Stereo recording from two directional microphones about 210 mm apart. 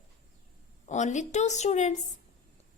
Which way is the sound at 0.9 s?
35° left (ahead or behind).